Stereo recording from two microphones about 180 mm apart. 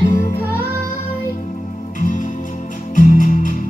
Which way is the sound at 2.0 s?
45° left (ahead or behind).